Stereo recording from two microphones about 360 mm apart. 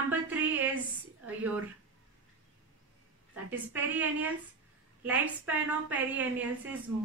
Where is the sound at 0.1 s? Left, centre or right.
Centre.